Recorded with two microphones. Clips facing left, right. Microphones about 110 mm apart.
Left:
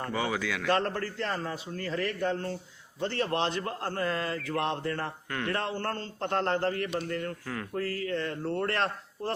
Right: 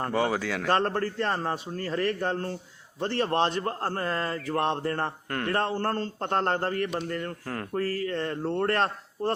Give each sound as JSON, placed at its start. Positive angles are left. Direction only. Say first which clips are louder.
{"t": 0.0, "sound": "a man's voice", "louder": "right 4 dB", "side_deg": -40}